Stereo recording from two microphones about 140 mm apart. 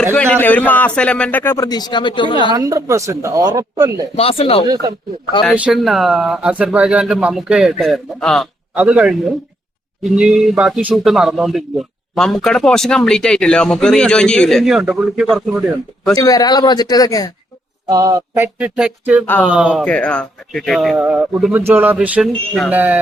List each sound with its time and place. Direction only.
0.1 s a man's voice: 15° left (ahead or behind); by 2.5 s 35° left (ahead or behind)
2.5 s speech: 25° right (ahead or behind)
4.2 s speech: 45° left (ahead or behind)
5.5 s speech: 5° right (ahead or behind)
8.7 s speech: 10° right (ahead or behind)
16.1 s speech: 25° left (ahead or behind)
17.8 s a sound: 25° right (ahead or behind); by 19.2 s 10° right (ahead or behind)
19.2 s a man's voice: 10° left (ahead or behind)
19.5 s a sound: 5° right (ahead or behind)
19.8 s speech: 10° left (ahead or behind)
21.0 s a sound: 10° right (ahead or behind)